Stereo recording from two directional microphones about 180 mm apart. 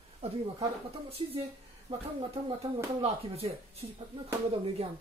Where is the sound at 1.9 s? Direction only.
35° right (ahead or behind).